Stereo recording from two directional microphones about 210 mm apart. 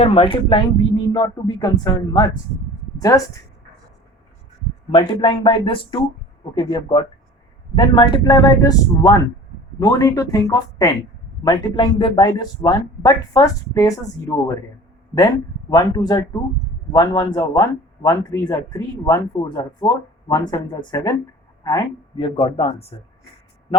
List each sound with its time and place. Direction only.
0.0 s a man's voice: 25° left (ahead or behind)
4.9 s a man's voice: 25° left (ahead or behind)
15.7 s a man's voice: 20° left (ahead or behind)